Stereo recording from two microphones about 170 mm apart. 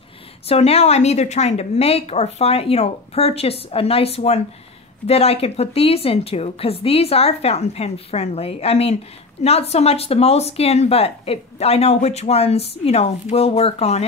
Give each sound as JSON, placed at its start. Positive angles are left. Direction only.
{"t": 0.5, "sound": "speech", "side_deg": 35}